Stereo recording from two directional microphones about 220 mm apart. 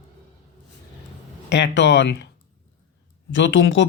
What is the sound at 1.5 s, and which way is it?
Speech, 50° left (ahead or behind).